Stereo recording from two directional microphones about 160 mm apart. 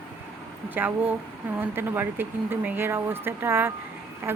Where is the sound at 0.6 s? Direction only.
10° right (ahead or behind).